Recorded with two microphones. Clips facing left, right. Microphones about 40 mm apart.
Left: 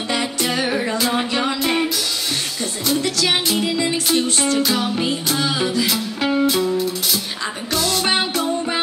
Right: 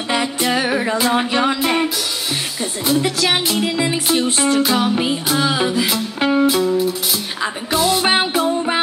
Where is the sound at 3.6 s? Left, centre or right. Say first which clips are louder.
Right 1 dB; centre.